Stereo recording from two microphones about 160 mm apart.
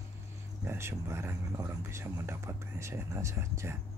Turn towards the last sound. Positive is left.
turn(degrees=-15)  # may be behind; listen again after turning